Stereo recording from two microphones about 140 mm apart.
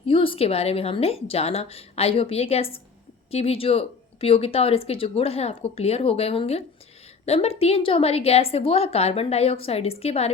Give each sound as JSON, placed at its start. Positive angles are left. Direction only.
{"t": 0.1, "sound": "speech", "side_deg": 40}